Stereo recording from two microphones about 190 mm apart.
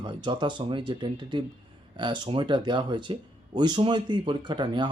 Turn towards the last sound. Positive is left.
turn(degrees=-25)  # may be behind; listen again after turning